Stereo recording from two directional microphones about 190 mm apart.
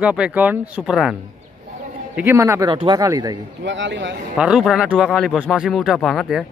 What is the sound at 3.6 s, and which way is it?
Speech, 70° right (ahead or behind).